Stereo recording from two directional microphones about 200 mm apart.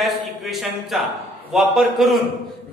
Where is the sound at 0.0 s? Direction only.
Centre (ahead or behind).